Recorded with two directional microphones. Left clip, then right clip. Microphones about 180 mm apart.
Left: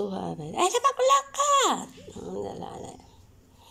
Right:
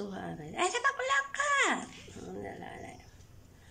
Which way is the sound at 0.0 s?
20° left (ahead or behind).